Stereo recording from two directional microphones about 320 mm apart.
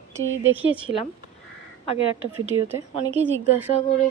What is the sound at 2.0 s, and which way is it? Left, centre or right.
Speech, right.